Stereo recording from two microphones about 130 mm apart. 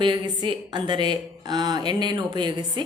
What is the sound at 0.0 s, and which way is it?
A woman's voice, 35° right (ahead or behind).